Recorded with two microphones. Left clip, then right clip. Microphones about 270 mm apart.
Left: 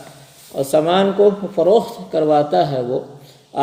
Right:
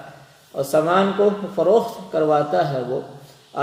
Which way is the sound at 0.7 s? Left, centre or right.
Left.